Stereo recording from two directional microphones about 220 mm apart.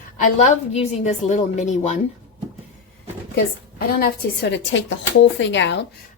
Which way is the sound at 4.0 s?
50° left (ahead or behind).